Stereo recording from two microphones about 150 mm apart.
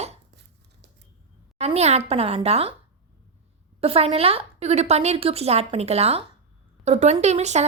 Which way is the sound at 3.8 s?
40° right (ahead or behind).